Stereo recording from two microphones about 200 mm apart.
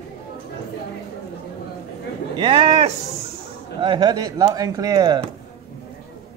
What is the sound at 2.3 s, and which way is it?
Speech, 25° right (ahead or behind).